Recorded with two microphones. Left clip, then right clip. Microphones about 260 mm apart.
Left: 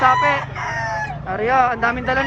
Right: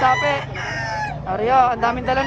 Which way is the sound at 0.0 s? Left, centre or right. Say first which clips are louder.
Left 2 dB; centre.